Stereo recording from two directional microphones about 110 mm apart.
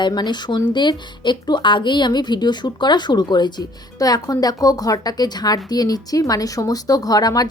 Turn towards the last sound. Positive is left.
turn(degrees=35)  # may be behind; listen again after turning